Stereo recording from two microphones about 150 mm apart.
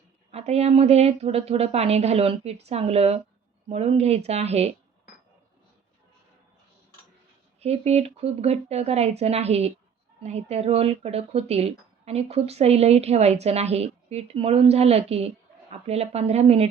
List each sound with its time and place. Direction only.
0.3 s speech: 45° right (ahead or behind)
7.6 s speech: 45° right (ahead or behind)